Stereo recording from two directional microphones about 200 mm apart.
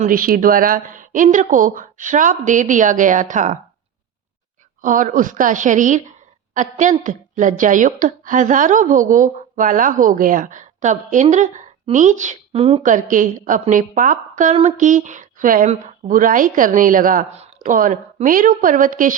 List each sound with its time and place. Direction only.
0.0 s a woman's voice: 45° right (ahead or behind)
4.8 s a woman's voice: 40° right (ahead or behind)